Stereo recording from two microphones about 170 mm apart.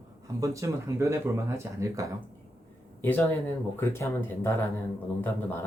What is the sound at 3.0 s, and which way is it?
Speech, 10° left (ahead or behind).